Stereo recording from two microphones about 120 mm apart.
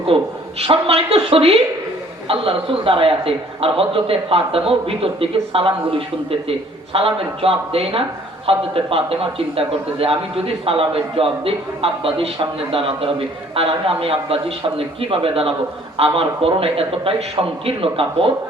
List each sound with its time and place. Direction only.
0.1 s a man's voice: 50° right (ahead or behind)